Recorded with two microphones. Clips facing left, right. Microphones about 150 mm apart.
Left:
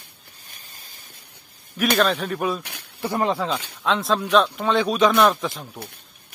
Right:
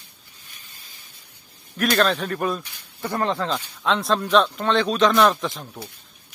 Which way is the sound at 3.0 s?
10° left (ahead or behind).